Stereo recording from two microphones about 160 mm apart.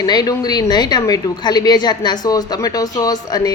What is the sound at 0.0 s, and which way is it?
A woman's voice, 25° left (ahead or behind).